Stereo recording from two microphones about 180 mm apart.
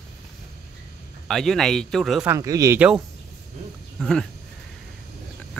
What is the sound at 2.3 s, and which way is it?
Speech, 20° right (ahead or behind).